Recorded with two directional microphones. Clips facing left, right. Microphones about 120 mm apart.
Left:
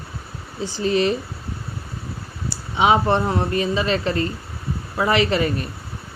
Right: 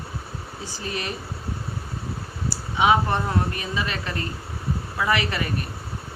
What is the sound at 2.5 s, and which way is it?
Speech, 25° left (ahead or behind).